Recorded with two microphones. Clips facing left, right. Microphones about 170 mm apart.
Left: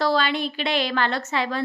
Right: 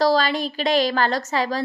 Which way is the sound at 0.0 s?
40° right (ahead or behind).